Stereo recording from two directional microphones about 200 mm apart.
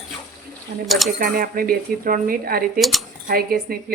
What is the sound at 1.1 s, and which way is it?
Speech, 45° right (ahead or behind).